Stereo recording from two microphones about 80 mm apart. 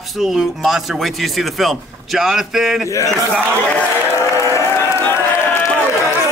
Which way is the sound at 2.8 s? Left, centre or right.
Left.